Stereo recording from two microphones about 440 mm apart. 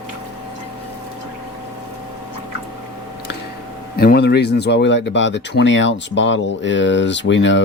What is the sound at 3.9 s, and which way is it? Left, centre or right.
Speech, left.